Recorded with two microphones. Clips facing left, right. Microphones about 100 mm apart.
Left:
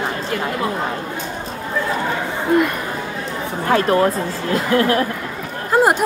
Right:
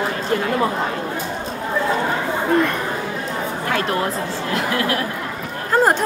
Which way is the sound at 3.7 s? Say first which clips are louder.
Left 7 dB; 35° left (ahead or behind).